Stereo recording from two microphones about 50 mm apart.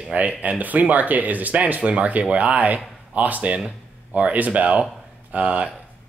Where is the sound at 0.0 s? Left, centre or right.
Right.